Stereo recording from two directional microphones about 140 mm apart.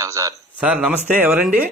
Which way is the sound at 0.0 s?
25° right (ahead or behind).